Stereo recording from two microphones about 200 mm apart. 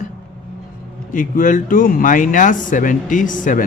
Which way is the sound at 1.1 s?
40° left (ahead or behind).